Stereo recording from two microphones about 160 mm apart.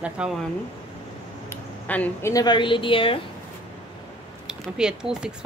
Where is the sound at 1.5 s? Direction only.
10° left (ahead or behind).